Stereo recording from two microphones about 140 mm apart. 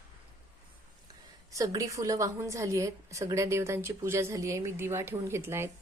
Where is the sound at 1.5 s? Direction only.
25° right (ahead or behind).